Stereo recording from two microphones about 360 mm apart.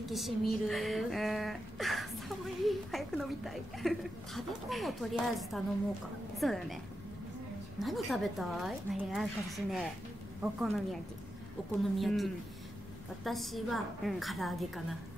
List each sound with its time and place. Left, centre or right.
0.0 s a woman's voice: centre
7.8 s a woman's voice: centre